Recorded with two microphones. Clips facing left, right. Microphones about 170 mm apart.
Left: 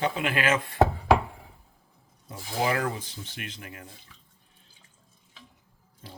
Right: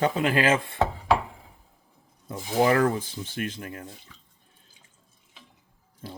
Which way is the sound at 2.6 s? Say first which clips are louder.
Right 6 dB; 45° right (ahead or behind).